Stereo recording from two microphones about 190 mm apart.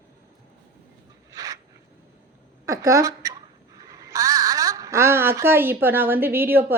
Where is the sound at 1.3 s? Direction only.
15° right (ahead or behind).